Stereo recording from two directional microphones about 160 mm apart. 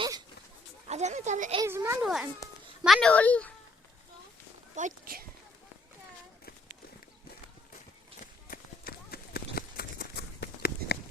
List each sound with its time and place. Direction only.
0.9 s speech: 45° right (ahead or behind)
1.6 s a child's voice: 15° right (ahead or behind)
2.0 s a child's voice: centre (ahead or behind)
4.7 s speech: 50° right (ahead or behind)
8.2 s run: 65° left (ahead or behind)